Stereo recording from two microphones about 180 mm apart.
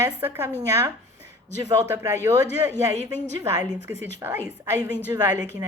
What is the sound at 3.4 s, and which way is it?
A woman's voice, 15° right (ahead or behind).